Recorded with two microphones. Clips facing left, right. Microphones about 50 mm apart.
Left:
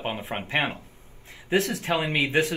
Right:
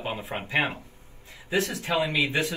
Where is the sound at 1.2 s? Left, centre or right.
Left.